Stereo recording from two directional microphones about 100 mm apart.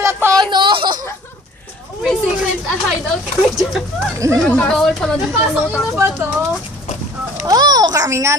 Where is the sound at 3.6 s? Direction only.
Centre (ahead or behind).